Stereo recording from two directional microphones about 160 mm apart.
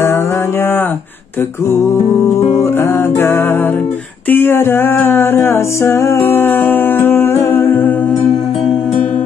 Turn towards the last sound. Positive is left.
turn(degrees=10)  # may be behind; listen again after turning